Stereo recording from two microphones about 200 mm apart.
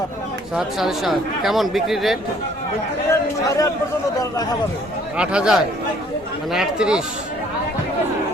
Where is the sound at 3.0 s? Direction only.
15° left (ahead or behind).